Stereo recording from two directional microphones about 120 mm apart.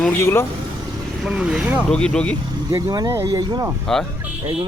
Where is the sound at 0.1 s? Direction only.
20° left (ahead or behind).